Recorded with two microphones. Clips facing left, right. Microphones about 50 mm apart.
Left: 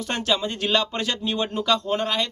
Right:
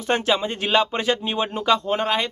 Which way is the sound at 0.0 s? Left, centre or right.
Right.